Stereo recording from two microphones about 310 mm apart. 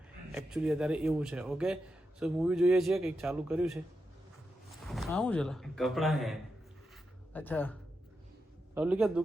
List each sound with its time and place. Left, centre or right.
0.3 s a man's voice: centre
4.9 s a man's voice: centre